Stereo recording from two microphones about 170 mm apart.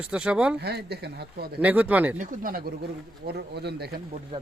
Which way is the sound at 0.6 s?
75° right (ahead or behind).